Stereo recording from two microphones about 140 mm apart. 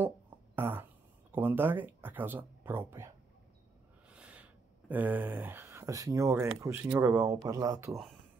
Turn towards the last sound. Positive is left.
turn(degrees=-25)  # may be behind; listen again after turning